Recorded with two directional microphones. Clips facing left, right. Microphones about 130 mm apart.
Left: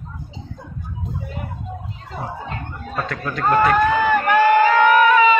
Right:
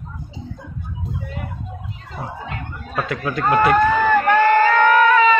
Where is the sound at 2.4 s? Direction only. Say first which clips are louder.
Even; 30° left (ahead or behind).